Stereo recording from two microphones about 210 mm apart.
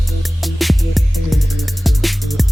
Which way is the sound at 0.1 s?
Centre (ahead or behind).